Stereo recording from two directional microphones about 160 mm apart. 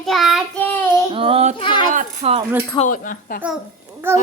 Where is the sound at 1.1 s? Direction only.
35° right (ahead or behind).